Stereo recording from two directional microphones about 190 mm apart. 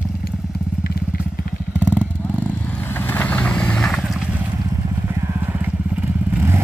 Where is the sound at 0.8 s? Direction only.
55° left (ahead or behind).